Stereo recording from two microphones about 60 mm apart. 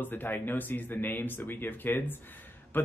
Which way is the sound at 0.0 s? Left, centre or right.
Left.